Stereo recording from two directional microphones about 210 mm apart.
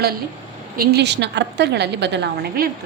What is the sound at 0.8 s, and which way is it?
A woman's voice, 50° right (ahead or behind).